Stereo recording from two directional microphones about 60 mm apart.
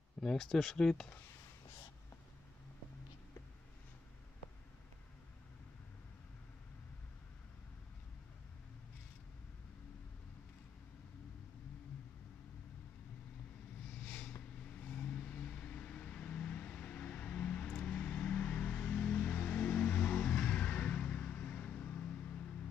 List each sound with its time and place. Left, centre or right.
0.2 s speech: centre
13.8 s a sound: centre
14.6 s vehicle: left